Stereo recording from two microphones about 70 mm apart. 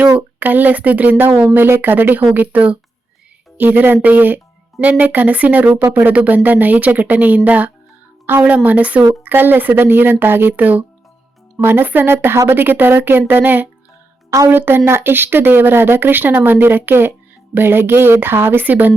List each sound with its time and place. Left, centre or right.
0.2 s speech: right
14.3 s speech: right